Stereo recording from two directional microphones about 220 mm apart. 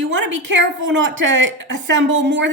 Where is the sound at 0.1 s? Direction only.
55° right (ahead or behind).